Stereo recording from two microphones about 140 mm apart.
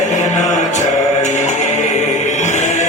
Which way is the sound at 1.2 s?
60° left (ahead or behind).